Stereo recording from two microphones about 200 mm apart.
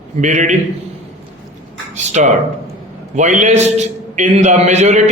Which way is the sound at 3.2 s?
35° right (ahead or behind).